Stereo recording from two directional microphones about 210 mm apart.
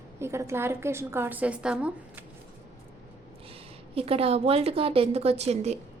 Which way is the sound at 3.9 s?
25° right (ahead or behind).